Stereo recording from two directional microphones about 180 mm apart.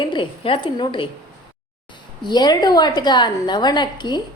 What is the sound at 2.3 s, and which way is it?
A woman's voice, 25° left (ahead or behind).